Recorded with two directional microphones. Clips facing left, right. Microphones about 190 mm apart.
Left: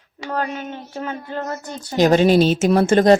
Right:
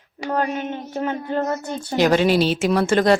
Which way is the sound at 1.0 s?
20° right (ahead or behind).